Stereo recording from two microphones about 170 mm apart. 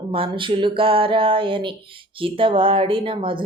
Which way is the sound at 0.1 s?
30° right (ahead or behind).